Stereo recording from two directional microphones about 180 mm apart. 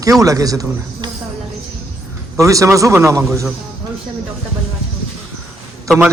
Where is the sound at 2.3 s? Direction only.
15° right (ahead or behind).